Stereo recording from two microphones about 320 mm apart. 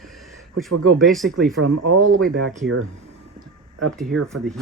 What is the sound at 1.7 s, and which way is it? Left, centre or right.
Speech, right.